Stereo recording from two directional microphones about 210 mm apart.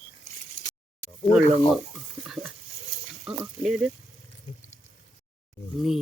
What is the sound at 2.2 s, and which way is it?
Stir, centre (ahead or behind).